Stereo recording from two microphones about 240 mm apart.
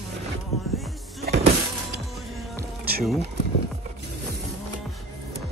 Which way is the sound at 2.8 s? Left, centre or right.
Right.